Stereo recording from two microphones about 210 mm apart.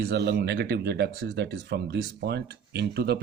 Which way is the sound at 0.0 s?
50° right (ahead or behind).